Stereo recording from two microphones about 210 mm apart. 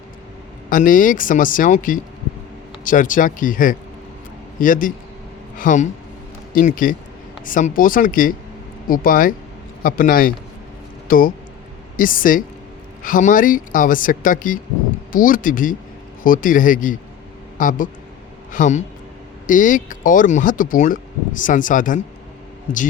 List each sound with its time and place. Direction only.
0.7 s speech: 40° left (ahead or behind)